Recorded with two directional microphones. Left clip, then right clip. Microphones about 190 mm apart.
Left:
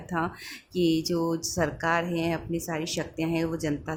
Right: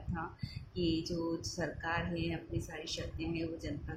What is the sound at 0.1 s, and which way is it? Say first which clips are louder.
Speech: left 13 dB; 60° left (ahead or behind).